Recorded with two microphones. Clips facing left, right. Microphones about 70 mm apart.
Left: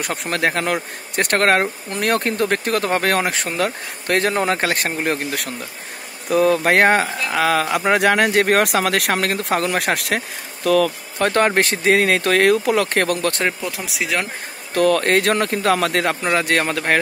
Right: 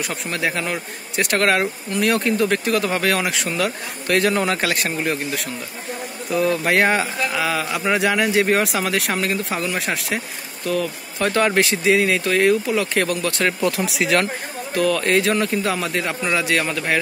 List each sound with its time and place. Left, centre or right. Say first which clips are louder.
0.0 s speech: left 3 dB; left
11.1 s speech: left 1 dB; left
13.7 s speech: right 4 dB; centre
14.7 s speech: left 3 dB; left
16.2 s speech: left 2 dB; left